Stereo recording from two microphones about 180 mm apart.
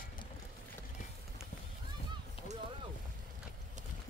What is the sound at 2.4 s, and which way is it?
Boat, 30° left (ahead or behind).